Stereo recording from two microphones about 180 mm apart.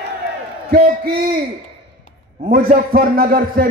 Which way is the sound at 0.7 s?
60° right (ahead or behind).